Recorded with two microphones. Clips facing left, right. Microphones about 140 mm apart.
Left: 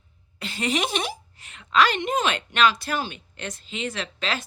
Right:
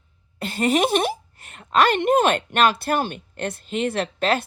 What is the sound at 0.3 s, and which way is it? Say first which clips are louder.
A woman's voice: right 6 dB; 50° right (ahead or behind).